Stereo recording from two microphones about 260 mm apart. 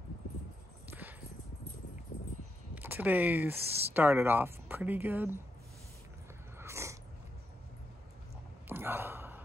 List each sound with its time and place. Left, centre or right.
0.8 s clip-clop: centre
2.7 s speech: centre
6.6 s dog: centre
8.6 s a sound: centre